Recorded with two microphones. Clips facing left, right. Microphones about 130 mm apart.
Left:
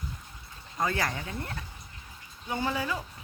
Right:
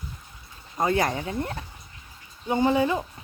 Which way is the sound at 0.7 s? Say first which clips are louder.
Right 6 dB; 25° right (ahead or behind).